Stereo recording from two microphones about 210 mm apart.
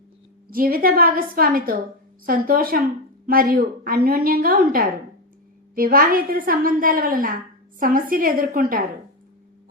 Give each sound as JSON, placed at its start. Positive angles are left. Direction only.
{"t": 0.5, "sound": "a woman's voice", "side_deg": -45}